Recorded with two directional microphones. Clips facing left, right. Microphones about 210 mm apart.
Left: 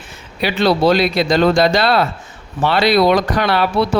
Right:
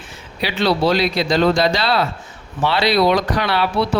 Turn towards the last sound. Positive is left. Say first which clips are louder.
# left 3 dB
turn(degrees=50)  # may be behind; listen again after turning